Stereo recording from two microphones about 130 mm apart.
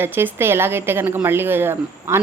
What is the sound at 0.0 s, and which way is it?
A woman's voice, 15° right (ahead or behind).